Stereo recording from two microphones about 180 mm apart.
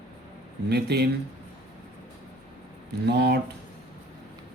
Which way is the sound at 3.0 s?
65° right (ahead or behind).